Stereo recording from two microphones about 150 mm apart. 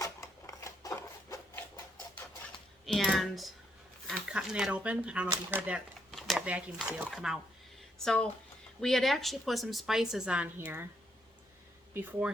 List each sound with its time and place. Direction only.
0.0 s a sound: 20° left (ahead or behind)
2.8 s typing: centre (ahead or behind)
4.1 s a woman's voice: 5° right (ahead or behind)